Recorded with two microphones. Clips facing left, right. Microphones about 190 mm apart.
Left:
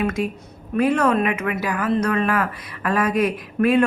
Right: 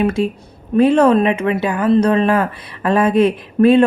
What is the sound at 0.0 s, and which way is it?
Speech, 30° right (ahead or behind).